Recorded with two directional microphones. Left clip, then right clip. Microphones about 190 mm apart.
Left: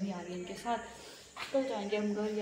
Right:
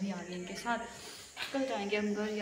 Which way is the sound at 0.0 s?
10° left (ahead or behind).